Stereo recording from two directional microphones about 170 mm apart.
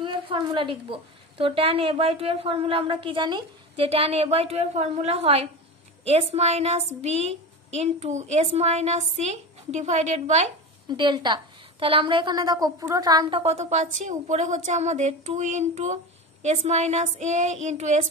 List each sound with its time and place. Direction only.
0.0 s a woman's voice: 30° right (ahead or behind)
10.9 s a woman's voice: 25° right (ahead or behind)
13.4 s a woman's voice: 40° right (ahead or behind)